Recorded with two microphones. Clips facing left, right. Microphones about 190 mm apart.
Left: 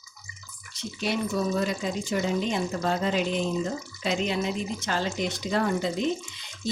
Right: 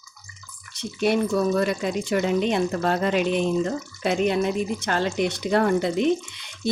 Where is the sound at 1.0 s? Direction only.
55° right (ahead or behind).